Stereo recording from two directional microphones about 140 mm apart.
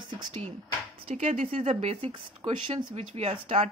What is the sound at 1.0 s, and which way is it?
Speech, 55° right (ahead or behind).